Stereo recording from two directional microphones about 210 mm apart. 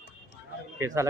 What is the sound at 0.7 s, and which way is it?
Speech, 15° right (ahead or behind).